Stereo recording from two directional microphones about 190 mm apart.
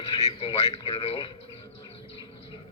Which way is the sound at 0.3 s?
30° left (ahead or behind).